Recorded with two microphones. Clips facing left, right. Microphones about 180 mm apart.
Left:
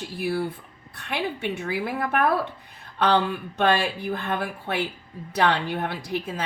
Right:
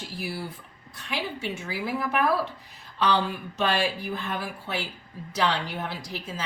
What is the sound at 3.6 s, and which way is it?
A woman's voice, 55° left (ahead or behind).